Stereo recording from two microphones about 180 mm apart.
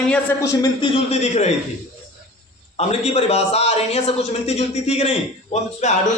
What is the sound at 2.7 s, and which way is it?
A man's voice, 35° left (ahead or behind).